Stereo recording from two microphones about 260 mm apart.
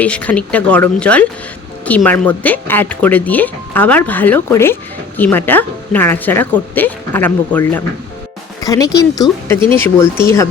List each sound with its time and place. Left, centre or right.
0.0 s speech: centre
9.6 s speech: centre
9.8 s speech: centre